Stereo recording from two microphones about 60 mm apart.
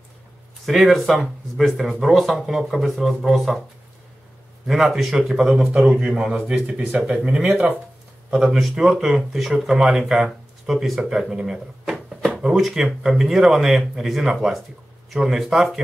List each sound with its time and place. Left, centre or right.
0.7 s speech: centre
4.6 s speech: centre